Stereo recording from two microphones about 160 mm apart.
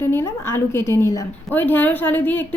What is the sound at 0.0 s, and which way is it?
Speech, 15° left (ahead or behind).